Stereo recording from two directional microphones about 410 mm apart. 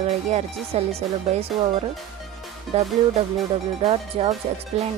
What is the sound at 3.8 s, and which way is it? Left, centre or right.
Speech, centre.